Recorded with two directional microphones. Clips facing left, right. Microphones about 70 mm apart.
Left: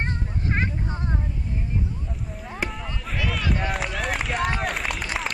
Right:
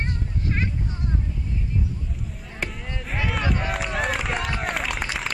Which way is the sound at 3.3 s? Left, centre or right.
Centre.